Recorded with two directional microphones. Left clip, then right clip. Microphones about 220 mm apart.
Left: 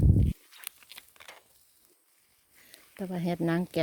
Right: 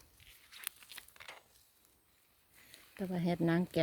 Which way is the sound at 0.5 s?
30° left (ahead or behind).